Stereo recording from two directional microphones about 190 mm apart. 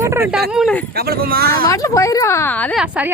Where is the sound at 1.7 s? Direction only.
15° left (ahead or behind).